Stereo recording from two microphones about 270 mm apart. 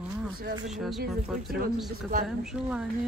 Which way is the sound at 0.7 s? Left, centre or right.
Centre.